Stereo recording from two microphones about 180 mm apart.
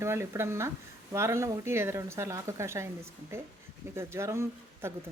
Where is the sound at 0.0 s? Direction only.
15° right (ahead or behind).